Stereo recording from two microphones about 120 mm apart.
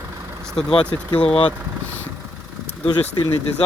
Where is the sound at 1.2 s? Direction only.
50° left (ahead or behind).